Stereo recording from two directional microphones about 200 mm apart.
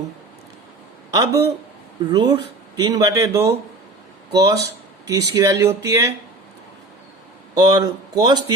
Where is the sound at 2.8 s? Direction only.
20° right (ahead or behind).